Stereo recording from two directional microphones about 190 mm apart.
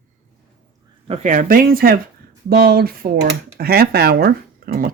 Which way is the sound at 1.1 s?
45° right (ahead or behind).